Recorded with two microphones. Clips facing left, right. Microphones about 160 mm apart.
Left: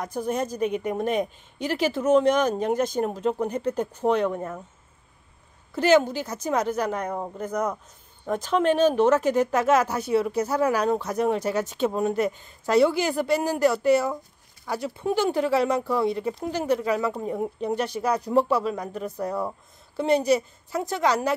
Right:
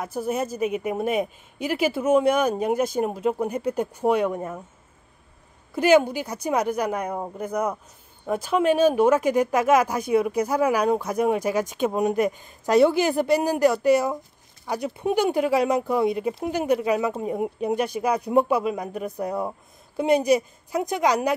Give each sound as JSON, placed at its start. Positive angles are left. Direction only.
{"t": 0.0, "sound": "speech", "side_deg": -5}
{"t": 5.8, "sound": "speech", "side_deg": -10}